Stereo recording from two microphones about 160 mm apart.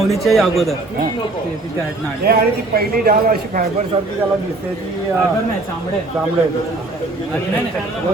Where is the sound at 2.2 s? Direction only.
70° right (ahead or behind).